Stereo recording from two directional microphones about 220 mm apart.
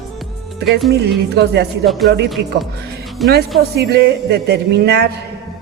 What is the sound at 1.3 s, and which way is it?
Speech, 50° right (ahead or behind).